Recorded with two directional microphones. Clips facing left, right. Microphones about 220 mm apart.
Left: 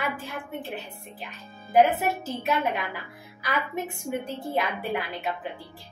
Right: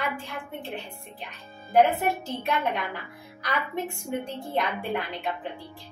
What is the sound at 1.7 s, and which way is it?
A woman's voice, 5° left (ahead or behind).